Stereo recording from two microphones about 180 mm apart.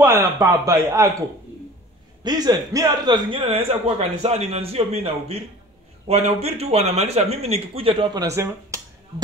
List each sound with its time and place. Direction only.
0.0 s a man's voice: 15° right (ahead or behind)
2.2 s a man's voice: 20° right (ahead or behind)